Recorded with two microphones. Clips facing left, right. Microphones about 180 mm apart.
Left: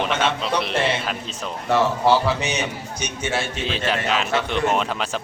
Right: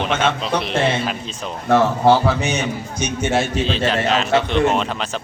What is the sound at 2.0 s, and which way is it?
A man's voice, 55° right (ahead or behind).